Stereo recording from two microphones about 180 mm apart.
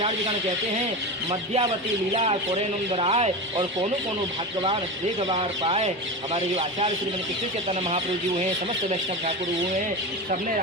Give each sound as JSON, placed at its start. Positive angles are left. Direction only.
{"t": 1.3, "sound": "speech", "side_deg": -30}
{"t": 5.3, "sound": "speech", "side_deg": -35}